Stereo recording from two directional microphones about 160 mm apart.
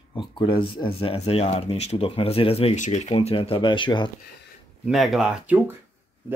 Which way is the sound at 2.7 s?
50° left (ahead or behind).